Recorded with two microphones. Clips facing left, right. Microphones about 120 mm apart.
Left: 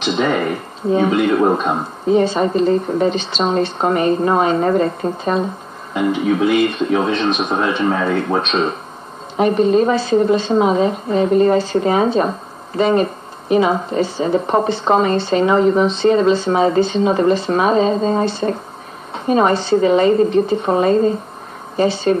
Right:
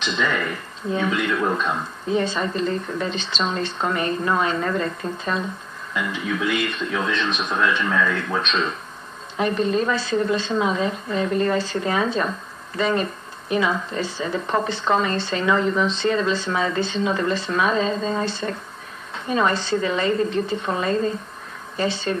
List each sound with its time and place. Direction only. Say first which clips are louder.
0.2 s a woman's voice: left 6 dB; 40° left (ahead or behind)
19.5 s a woman's voice: left 8 dB; 30° left (ahead or behind)
19.9 s a woman's voice: left 10 dB; 40° left (ahead or behind)